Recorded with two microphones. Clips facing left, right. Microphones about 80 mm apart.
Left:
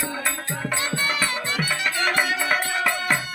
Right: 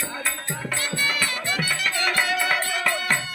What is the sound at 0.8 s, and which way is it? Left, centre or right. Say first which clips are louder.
Music: left 1 dB; left.